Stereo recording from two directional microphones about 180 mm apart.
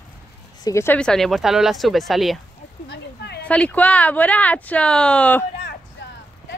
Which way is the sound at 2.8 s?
70° left (ahead or behind).